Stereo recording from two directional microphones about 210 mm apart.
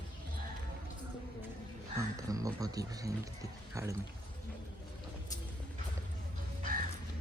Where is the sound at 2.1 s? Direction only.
15° right (ahead or behind).